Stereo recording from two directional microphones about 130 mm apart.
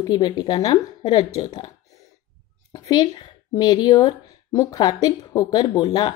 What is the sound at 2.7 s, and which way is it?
A woman's voice, 30° left (ahead or behind).